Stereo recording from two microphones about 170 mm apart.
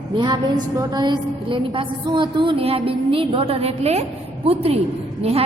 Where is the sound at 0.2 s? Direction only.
25° right (ahead or behind).